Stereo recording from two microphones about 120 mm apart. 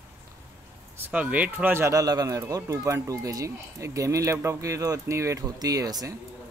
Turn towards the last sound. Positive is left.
turn(degrees=-30)  # may be behind; listen again after turning